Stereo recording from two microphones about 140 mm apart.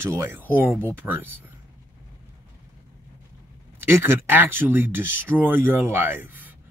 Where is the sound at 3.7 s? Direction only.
15° right (ahead or behind).